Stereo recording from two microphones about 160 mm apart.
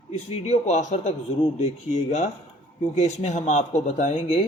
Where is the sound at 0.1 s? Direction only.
45° left (ahead or behind).